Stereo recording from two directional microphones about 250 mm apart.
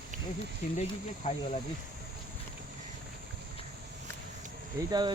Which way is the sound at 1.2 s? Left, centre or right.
Left.